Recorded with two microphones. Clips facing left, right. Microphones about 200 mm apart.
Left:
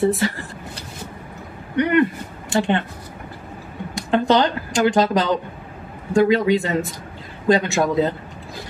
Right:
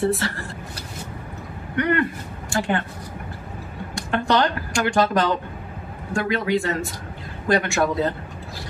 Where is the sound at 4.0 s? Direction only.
20° left (ahead or behind).